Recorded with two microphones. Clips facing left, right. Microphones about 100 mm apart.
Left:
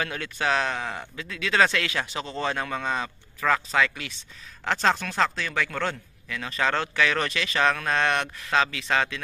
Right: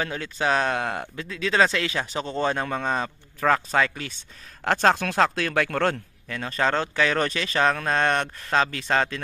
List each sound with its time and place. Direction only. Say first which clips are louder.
0.0 s speech: right 2 dB; 25° right (ahead or behind)
0.5 s speech: right 3 dB; 40° right (ahead or behind)
1.3 s speech: right 1 dB; 30° right (ahead or behind)